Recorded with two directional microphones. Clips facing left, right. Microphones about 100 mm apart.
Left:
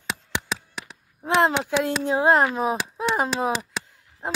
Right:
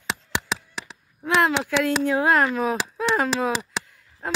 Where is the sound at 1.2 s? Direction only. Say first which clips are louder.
Left 1 dB; 30° left (ahead or behind).